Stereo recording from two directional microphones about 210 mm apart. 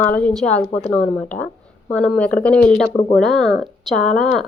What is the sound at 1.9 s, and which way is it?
Speech, 5° left (ahead or behind).